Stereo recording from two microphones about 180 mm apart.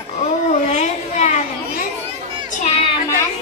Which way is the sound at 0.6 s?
40° left (ahead or behind).